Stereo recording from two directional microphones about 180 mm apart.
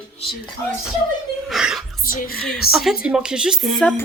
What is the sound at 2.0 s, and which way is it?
Music, 50° left (ahead or behind).